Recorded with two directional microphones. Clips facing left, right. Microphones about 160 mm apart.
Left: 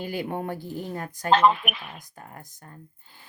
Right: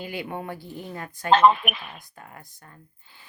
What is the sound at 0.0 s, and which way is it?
Speech, 40° left (ahead or behind).